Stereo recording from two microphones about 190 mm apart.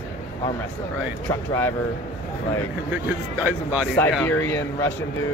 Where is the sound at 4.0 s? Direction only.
10° left (ahead or behind).